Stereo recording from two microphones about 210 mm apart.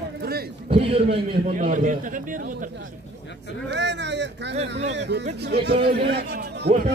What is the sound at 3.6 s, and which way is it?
Speech, 55° right (ahead or behind).